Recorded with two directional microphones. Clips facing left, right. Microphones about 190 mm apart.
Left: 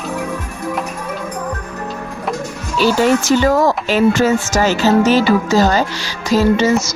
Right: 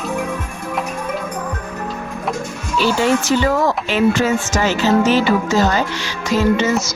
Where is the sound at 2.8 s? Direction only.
40° left (ahead or behind).